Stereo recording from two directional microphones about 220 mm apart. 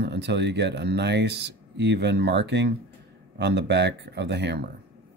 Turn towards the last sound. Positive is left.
turn(degrees=-50)  # may be behind; listen again after turning